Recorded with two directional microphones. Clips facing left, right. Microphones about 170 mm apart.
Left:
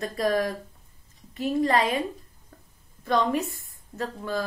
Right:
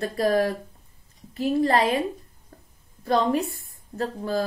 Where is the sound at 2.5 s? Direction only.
35° right (ahead or behind).